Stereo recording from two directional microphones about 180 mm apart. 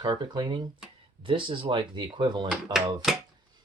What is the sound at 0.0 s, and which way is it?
Speech, 25° right (ahead or behind).